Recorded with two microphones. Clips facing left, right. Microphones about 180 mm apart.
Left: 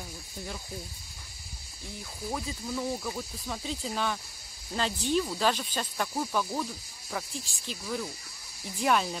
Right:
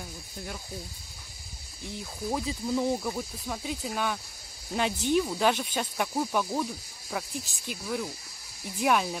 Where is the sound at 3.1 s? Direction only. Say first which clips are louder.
Right 2 dB; 10° right (ahead or behind).